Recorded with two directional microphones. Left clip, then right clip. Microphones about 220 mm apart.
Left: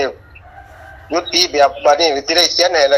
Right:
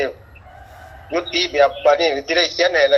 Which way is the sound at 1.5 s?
5° left (ahead or behind).